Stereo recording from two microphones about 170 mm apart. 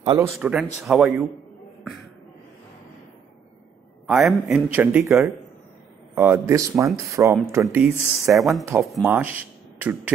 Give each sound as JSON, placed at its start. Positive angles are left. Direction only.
{"t": 0.2, "sound": "a man's voice", "side_deg": -5}
{"t": 4.1, "sound": "a man's voice", "side_deg": 0}
{"t": 8.2, "sound": "a man's voice", "side_deg": 0}
{"t": 8.6, "sound": "a man's voice", "side_deg": -15}